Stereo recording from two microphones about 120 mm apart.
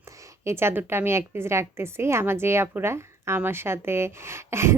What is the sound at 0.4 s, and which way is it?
A woman's voice, 20° right (ahead or behind).